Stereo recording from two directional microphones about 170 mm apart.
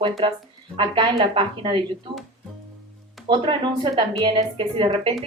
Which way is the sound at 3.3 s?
30° right (ahead or behind).